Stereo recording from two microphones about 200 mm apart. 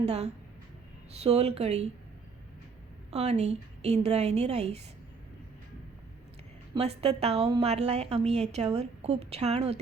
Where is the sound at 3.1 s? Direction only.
30° right (ahead or behind).